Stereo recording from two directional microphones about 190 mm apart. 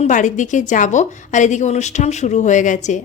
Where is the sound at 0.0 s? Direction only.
40° left (ahead or behind).